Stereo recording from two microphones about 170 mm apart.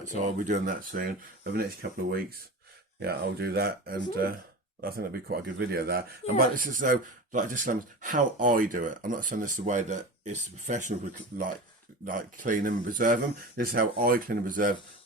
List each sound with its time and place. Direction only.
0.1 s speech: 45° right (ahead or behind); by 6.1 s 65° right (ahead or behind)
6.5 s speech: 55° right (ahead or behind)
12.0 s speech: 50° right (ahead or behind)